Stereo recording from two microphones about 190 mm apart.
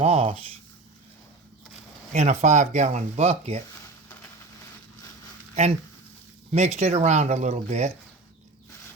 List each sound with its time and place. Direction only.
0.0 s speech: 35° right (ahead or behind)
2.1 s speech: 40° right (ahead or behind)
6.5 s speech: 35° right (ahead or behind)